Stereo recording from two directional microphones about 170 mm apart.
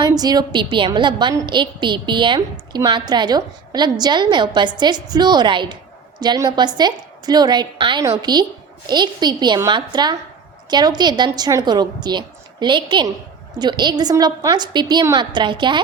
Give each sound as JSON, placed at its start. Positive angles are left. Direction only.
{"t": 0.0, "sound": "a woman's voice", "side_deg": -20}